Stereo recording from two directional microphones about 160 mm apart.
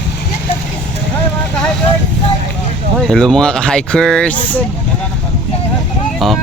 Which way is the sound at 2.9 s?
5° left (ahead or behind).